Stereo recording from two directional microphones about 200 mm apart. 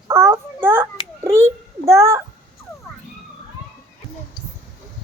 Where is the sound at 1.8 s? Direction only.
15° right (ahead or behind).